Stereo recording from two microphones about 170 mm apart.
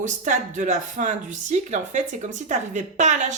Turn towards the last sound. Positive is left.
turn(degrees=-45)  # may be behind; listen again after turning